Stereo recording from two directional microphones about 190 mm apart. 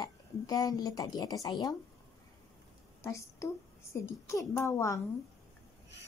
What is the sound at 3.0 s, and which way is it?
A woman's voice, 15° left (ahead or behind).